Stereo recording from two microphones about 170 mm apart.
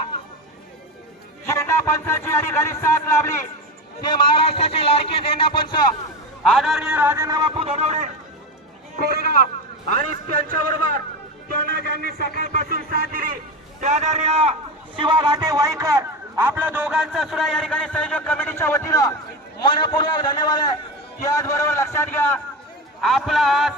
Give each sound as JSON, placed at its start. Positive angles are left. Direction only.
{"t": 1.5, "sound": "a man's voice", "side_deg": 15}
{"t": 4.0, "sound": "a man's voice", "side_deg": 30}
{"t": 6.4, "sound": "a man's voice", "side_deg": 0}
{"t": 9.0, "sound": "a man's voice", "side_deg": -65}
{"t": 12.4, "sound": "a man's voice", "side_deg": -60}
{"t": 13.8, "sound": "a man's voice", "side_deg": -45}
{"t": 14.9, "sound": "a man's voice", "side_deg": -25}
{"t": 23.0, "sound": "a man's voice", "side_deg": 0}